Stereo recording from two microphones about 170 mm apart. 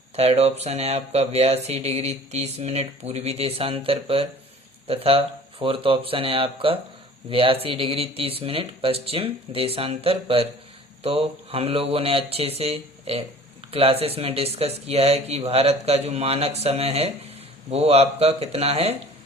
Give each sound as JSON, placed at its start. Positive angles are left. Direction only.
{"t": 0.2, "sound": "speech", "side_deg": -35}